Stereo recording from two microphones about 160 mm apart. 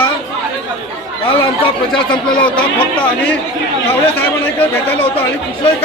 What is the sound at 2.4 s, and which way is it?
Speech, 10° left (ahead or behind).